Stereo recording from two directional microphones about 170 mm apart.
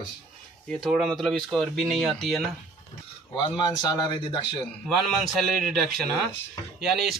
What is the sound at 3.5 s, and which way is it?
Speech, 25° left (ahead or behind).